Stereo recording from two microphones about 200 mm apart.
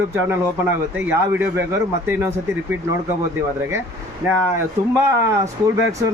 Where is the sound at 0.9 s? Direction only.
10° right (ahead or behind).